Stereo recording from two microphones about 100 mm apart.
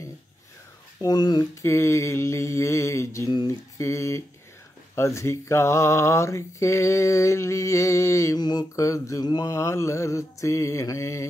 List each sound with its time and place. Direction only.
1.0 s speech: 45° left (ahead or behind)
1.6 s a sound: 30° left (ahead or behind)
8.4 s speech: 45° left (ahead or behind)
8.7 s mantra: 30° left (ahead or behind)